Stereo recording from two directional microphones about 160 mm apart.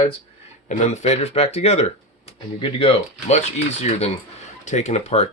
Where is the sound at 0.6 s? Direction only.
50° left (ahead or behind).